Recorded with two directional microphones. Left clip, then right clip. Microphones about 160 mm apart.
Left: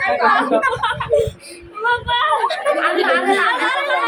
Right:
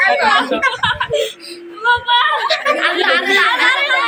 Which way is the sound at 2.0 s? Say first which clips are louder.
Right 3 dB; 75° left (ahead or behind).